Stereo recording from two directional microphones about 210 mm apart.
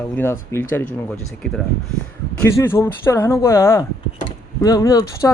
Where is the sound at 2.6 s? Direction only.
10° left (ahead or behind).